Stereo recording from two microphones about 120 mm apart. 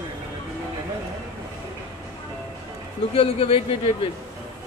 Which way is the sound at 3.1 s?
50° left (ahead or behind).